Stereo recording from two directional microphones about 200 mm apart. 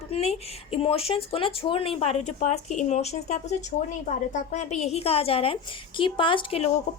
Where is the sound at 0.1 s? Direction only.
30° left (ahead or behind).